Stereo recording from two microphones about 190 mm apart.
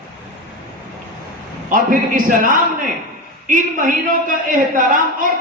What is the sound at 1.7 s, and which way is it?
A man's voice, 45° right (ahead or behind).